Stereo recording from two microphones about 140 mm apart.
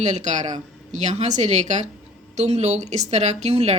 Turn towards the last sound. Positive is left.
turn(degrees=-50)  # may be behind; listen again after turning